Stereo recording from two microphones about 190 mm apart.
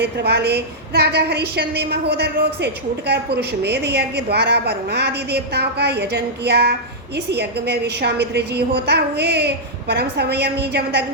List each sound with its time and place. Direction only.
0.0 s a woman's voice: 60° right (ahead or behind)